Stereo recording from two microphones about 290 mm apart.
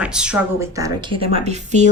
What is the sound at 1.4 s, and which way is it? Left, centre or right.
Speech, right.